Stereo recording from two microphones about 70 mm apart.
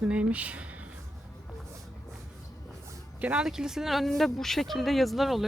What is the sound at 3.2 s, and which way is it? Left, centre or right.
Speech, centre.